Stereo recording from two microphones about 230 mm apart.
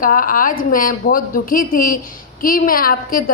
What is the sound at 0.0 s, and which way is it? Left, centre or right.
A woman's voice, left.